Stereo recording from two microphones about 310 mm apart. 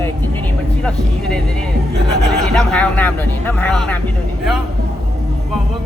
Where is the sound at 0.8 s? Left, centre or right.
Centre.